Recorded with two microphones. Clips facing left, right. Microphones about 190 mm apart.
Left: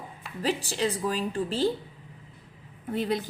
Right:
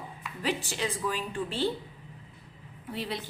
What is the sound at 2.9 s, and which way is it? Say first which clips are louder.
Speech: left 7 dB; 45° left (ahead or behind).